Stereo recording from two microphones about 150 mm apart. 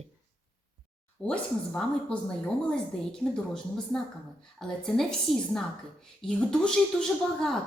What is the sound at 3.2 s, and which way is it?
A woman's voice, 5° left (ahead or behind).